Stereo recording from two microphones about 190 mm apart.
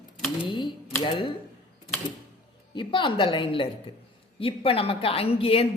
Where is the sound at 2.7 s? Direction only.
25° left (ahead or behind).